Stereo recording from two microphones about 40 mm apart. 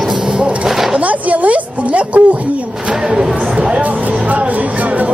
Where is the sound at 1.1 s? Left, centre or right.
Right.